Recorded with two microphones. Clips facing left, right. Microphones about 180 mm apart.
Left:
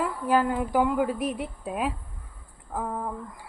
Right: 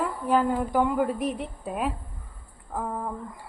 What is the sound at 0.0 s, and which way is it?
Speech, centre (ahead or behind).